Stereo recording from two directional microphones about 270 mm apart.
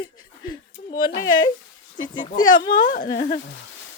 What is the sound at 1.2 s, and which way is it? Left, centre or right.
Speech, centre.